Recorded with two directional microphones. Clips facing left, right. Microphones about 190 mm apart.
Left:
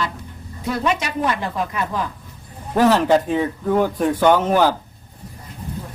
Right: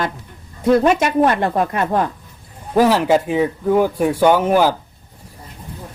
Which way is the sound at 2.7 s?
10° right (ahead or behind).